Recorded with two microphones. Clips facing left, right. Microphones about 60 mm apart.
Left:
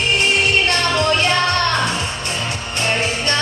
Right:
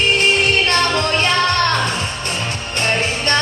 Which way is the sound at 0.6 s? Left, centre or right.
Right.